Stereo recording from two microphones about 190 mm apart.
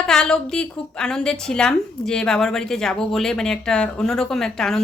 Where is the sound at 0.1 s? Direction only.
5° left (ahead or behind).